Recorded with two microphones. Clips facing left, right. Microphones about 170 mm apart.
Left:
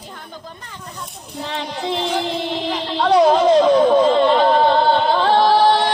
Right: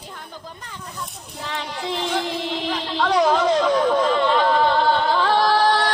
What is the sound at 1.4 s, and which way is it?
Child singing, 20° left (ahead or behind).